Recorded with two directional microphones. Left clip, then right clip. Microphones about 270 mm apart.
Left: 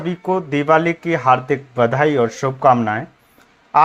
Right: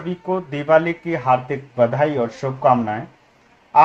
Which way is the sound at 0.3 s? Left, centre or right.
Left.